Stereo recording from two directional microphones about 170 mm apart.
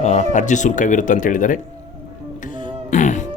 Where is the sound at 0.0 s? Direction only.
45° left (ahead or behind).